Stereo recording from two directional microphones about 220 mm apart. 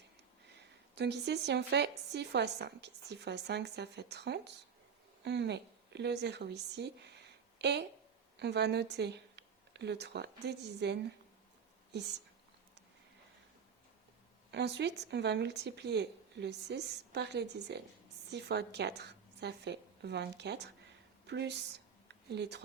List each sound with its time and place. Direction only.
0.9 s a woman's voice: 50° right (ahead or behind)
14.5 s a woman's voice: 50° right (ahead or behind)